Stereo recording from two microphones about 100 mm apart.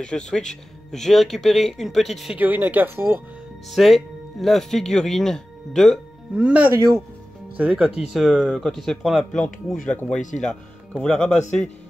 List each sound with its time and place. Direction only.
0.0 s speech: 5° left (ahead or behind)
2.3 s speech: 15° right (ahead or behind)
3.7 s speech: centre (ahead or behind)
6.3 s speech: 15° right (ahead or behind); by 11.7 s 5° left (ahead or behind)